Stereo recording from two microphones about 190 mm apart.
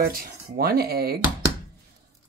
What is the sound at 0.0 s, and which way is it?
Speech, 50° right (ahead or behind).